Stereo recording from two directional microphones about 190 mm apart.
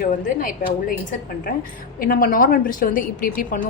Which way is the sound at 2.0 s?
50° left (ahead or behind).